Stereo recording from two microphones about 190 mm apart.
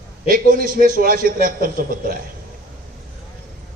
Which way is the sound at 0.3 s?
45° right (ahead or behind).